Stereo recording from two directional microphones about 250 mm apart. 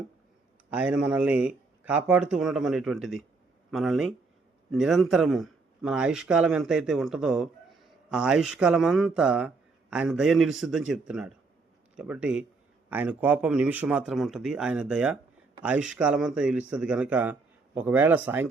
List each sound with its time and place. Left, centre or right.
0.7 s a man's voice: centre